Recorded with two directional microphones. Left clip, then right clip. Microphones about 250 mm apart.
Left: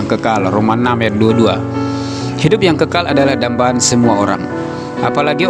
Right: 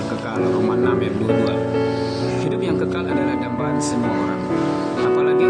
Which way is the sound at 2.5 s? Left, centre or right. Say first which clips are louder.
Left 14 dB; left.